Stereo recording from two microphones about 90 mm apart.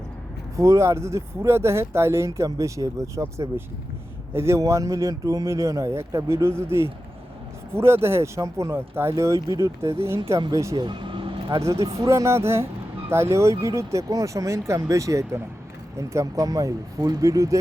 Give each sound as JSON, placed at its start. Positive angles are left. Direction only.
{"t": 0.5, "sound": "speech", "side_deg": -35}
{"t": 10.8, "sound": "vehicle", "side_deg": -60}
{"t": 11.5, "sound": "speech", "side_deg": -35}